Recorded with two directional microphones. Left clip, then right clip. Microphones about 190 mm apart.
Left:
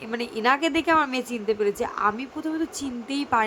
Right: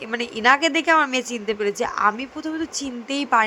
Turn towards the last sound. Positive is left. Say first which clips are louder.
# right 4 dB
turn(degrees=-10)  # may be behind; listen again after turning